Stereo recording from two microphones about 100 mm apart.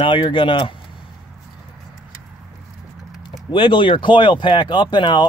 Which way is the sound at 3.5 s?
55° left (ahead or behind).